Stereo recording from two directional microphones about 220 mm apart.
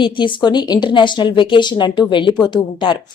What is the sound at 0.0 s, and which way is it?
Speech, 20° left (ahead or behind).